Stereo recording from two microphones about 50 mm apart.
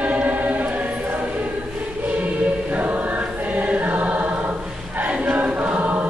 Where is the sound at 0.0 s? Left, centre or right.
Right.